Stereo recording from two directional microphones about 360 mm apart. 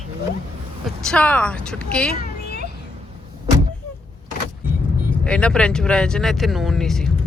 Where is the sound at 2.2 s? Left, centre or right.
Left.